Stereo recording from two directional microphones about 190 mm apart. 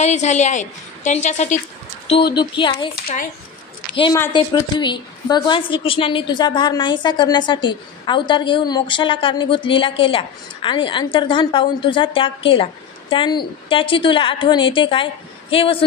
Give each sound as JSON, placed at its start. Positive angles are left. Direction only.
{"t": 0.0, "sound": "a woman's voice", "side_deg": 40}
{"t": 2.3, "sound": "a woman's voice", "side_deg": 25}
{"t": 3.9, "sound": "a woman's voice", "side_deg": 25}